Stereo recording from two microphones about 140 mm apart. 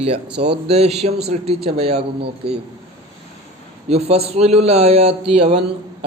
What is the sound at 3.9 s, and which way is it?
A man's voice, 45° right (ahead or behind).